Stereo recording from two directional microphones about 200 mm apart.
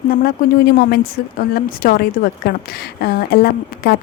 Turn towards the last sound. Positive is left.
turn(degrees=50)  # may be behind; listen again after turning